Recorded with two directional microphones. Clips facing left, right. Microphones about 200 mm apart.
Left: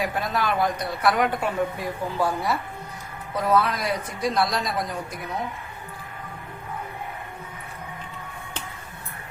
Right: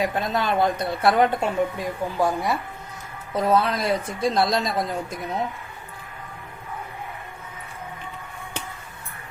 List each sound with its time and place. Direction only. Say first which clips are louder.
0.0 s a woman's voice: right 2 dB; 25° right (ahead or behind)
3.3 s a woman's voice: right 2 dB; 25° right (ahead or behind)